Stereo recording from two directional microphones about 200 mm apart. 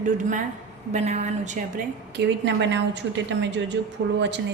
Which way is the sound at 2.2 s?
60° right (ahead or behind).